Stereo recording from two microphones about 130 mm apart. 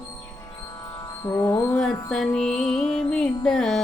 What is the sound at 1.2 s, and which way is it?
Music, 30° left (ahead or behind).